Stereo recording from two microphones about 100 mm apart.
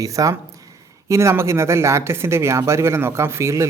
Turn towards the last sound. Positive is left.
turn(degrees=-30)  # may be behind; listen again after turning